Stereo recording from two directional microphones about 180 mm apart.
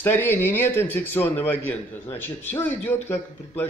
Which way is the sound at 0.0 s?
10° left (ahead or behind).